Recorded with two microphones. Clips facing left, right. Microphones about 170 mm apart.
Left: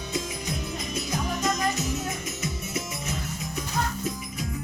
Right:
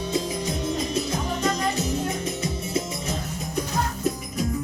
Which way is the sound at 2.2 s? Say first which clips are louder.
Right 5 dB; 30° right (ahead or behind).